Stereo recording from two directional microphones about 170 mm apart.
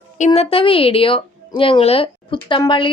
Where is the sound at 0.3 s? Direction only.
30° left (ahead or behind).